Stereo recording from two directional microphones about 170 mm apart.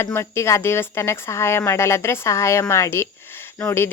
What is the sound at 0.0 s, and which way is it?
Speech, 15° left (ahead or behind).